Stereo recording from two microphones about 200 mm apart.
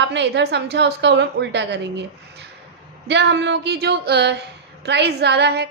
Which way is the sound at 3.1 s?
60° right (ahead or behind).